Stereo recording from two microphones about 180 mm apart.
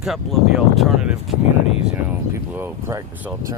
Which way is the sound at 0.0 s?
Centre (ahead or behind).